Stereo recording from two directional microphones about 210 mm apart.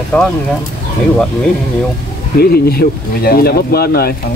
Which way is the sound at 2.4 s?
45° left (ahead or behind).